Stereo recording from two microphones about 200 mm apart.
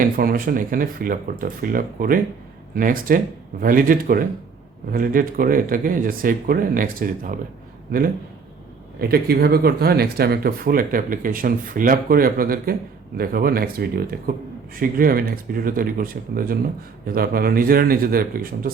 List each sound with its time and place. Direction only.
0.0 s speech: 45° right (ahead or behind)
9.0 s speech: 50° right (ahead or behind)